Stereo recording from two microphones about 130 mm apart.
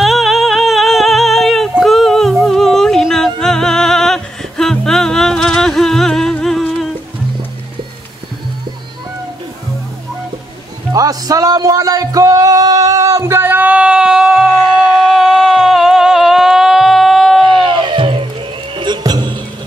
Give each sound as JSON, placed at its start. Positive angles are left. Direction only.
{"t": 0.0, "sound": "music", "side_deg": 0}
{"t": 10.9, "sound": "music", "side_deg": -30}
{"t": 15.1, "sound": "a sound", "side_deg": -5}
{"t": 17.5, "sound": "music", "side_deg": -40}